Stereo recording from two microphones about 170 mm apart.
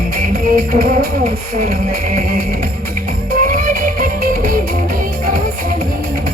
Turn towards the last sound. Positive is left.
turn(degrees=-55)  # may be behind; listen again after turning